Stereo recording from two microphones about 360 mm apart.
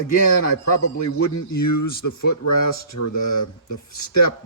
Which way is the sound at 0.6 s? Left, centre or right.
Left.